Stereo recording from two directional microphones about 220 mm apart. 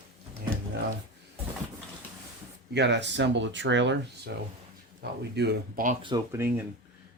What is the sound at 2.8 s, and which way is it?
Speech, 50° right (ahead or behind).